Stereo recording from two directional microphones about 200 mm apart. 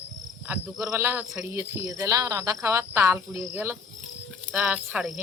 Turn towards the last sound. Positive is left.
turn(degrees=-5)  # may be behind; listen again after turning